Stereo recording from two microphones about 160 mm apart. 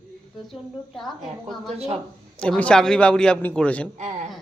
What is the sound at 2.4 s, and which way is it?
Speech, 5° left (ahead or behind).